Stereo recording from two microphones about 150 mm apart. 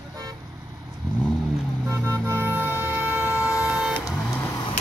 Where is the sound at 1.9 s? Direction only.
15° right (ahead or behind).